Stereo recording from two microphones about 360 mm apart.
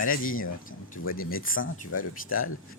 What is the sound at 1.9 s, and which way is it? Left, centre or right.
Speech, left.